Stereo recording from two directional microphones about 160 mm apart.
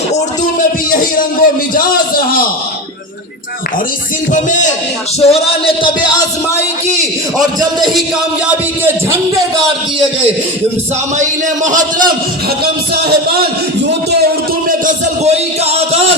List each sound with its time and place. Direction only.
0.9 s a man's voice: 60° left (ahead or behind)
4.3 s music: 50° left (ahead or behind)
5.2 s speech: 35° left (ahead or behind)
8.4 s speech: 10° right (ahead or behind)
11.2 s a man's voice: 50° right (ahead or behind)
14.7 s a sound: 50° right (ahead or behind)